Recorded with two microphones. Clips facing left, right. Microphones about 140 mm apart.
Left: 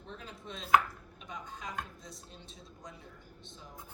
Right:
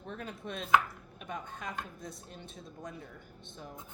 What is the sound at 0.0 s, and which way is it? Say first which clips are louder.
Speech: right 5 dB; 55° right (ahead or behind).